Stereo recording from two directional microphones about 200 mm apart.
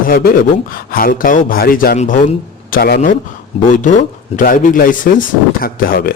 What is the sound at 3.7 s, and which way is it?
Speech, 40° left (ahead or behind).